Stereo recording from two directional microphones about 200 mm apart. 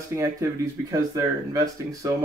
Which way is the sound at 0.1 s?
15° right (ahead or behind).